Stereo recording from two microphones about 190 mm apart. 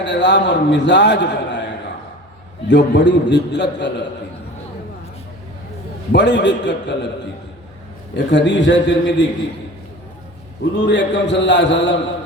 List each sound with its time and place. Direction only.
0.0 s a man's voice: 65° left (ahead or behind)
6.1 s a man's voice: 65° left (ahead or behind)
8.1 s a man's voice: 70° left (ahead or behind)
10.8 s a man's voice: 70° left (ahead or behind)